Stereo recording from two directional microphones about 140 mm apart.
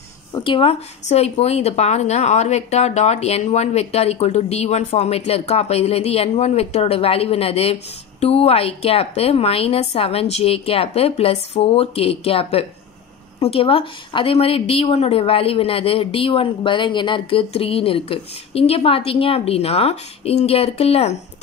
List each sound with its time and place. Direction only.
0.3 s speech: 35° left (ahead or behind)
1.0 s a woman's voice: 50° left (ahead or behind)